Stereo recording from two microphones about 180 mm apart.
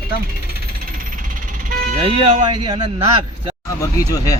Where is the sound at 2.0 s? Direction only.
30° right (ahead or behind).